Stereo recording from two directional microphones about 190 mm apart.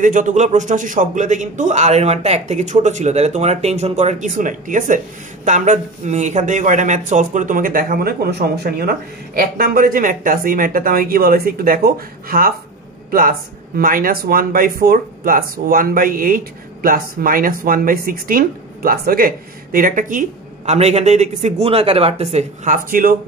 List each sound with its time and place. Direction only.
0.0 s a man's voice: 40° right (ahead or behind)